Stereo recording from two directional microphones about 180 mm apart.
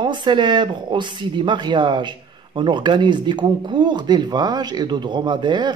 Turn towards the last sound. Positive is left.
turn(degrees=-25)  # may be behind; listen again after turning